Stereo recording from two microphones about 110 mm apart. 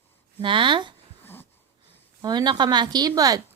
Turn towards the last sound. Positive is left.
turn(degrees=-35)  # may be behind; listen again after turning